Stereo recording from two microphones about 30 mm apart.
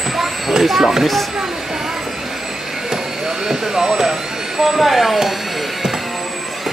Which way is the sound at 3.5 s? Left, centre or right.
Centre.